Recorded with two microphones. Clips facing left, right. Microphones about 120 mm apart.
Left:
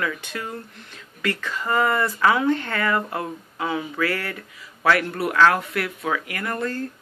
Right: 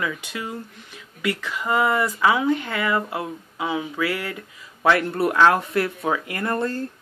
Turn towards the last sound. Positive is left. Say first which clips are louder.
# right 3 dB
turn(degrees=-25)  # may be behind; listen again after turning